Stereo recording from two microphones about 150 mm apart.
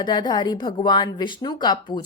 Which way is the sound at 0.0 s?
30° left (ahead or behind).